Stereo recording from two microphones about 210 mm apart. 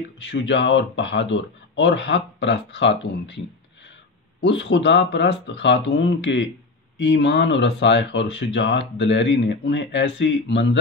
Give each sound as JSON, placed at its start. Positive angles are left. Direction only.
{"t": 0.2, "sound": "speech", "side_deg": 60}
{"t": 4.4, "sound": "speech", "side_deg": 60}